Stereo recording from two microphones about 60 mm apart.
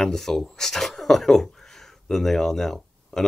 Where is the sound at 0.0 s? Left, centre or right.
Centre.